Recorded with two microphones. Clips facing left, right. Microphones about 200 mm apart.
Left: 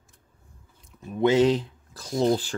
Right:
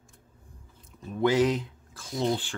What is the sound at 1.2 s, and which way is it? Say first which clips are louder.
Speech: left 4 dB; 25° left (ahead or behind).